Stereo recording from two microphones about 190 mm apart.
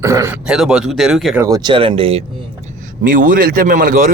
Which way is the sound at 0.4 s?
5° right (ahead or behind).